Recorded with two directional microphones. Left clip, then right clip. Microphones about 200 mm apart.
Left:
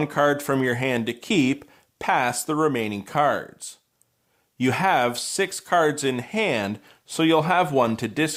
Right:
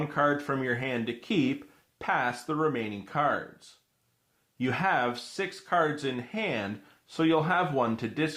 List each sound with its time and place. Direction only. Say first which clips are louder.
0.0 s speech: left 6 dB; 40° left (ahead or behind)